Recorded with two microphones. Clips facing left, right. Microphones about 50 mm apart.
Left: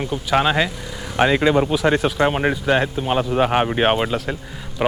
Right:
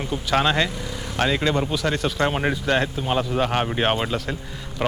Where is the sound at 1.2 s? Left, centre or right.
Centre.